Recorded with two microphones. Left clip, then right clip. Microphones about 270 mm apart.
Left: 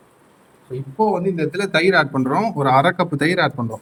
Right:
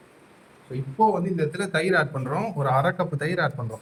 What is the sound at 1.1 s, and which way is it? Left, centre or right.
Speech, left.